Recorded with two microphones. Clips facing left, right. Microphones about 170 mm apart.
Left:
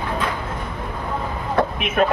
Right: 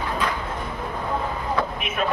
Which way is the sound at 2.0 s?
55° left (ahead or behind).